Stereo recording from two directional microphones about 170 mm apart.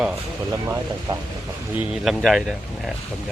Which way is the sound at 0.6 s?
15° right (ahead or behind).